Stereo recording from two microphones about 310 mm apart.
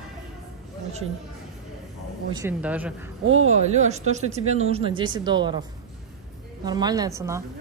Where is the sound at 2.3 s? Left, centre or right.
Centre.